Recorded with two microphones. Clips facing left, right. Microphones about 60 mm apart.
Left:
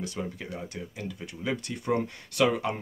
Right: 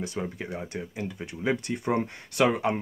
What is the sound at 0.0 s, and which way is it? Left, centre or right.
Speech, right.